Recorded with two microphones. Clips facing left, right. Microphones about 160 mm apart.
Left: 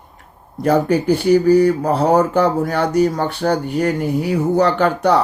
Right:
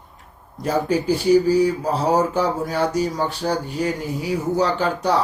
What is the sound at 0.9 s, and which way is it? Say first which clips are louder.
Speech: left 3 dB; 60° left (ahead or behind).